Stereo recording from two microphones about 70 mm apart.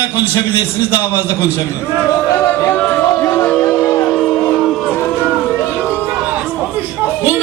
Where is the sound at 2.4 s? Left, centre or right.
Left.